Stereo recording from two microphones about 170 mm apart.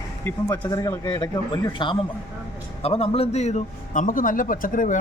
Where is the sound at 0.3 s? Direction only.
20° left (ahead or behind).